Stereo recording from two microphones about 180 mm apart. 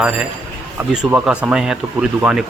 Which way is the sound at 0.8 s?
10° right (ahead or behind).